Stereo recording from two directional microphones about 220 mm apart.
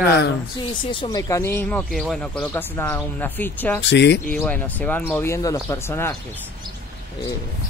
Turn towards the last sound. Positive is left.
turn(degrees=10)  # may be behind; listen again after turning